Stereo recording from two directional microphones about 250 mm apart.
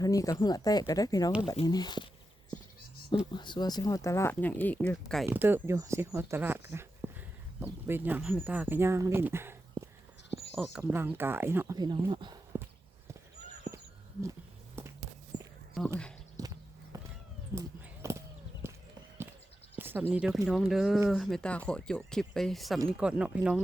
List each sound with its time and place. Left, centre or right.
0.0 s speech: centre
3.3 s speech: centre
15.3 s walk: centre
16.4 s clip-clop: centre
16.9 s cat: centre
18.6 s walk: centre
19.7 s speech: centre